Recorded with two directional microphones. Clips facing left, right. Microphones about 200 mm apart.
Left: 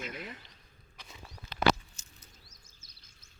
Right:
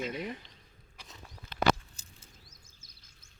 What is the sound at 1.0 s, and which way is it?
Walk, centre (ahead or behind).